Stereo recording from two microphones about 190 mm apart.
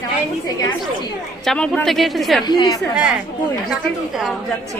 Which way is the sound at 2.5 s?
20° left (ahead or behind).